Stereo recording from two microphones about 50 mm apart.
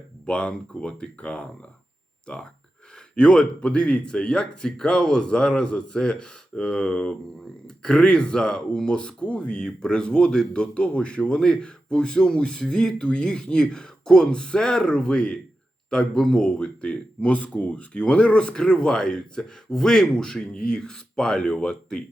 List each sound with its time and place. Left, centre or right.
0.3 s speech: left